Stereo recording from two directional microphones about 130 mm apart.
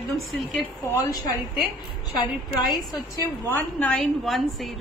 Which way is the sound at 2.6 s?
Centre (ahead or behind).